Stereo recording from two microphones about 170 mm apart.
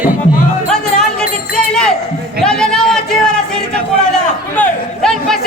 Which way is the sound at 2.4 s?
5° left (ahead or behind).